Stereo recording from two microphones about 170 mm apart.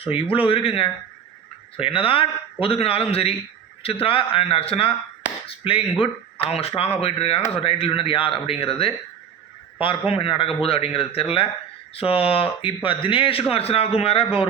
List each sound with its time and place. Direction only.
0.0 s speech: 30° left (ahead or behind)